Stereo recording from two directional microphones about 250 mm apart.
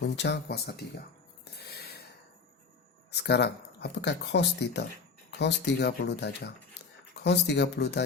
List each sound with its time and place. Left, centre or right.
0.2 s speech: left
1.5 s a sound: left
3.1 s speech: left